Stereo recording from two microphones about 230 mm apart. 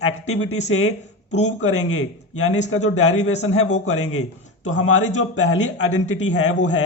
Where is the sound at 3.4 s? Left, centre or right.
Left.